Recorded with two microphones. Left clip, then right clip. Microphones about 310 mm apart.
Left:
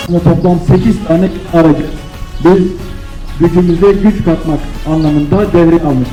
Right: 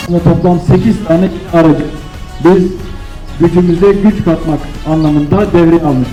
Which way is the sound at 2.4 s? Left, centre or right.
Right.